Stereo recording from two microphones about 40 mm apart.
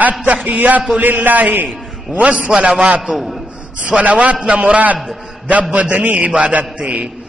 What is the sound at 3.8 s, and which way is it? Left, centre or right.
A man's voice, right.